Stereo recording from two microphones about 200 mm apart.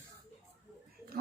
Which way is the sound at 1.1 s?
50° right (ahead or behind).